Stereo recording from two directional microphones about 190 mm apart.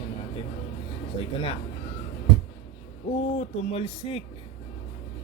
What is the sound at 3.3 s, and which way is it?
Speech, 35° left (ahead or behind).